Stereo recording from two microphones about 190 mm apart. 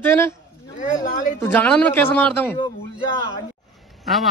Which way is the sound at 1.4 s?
10° left (ahead or behind).